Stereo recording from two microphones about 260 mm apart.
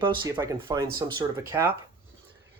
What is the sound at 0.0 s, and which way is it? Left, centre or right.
Speech, centre.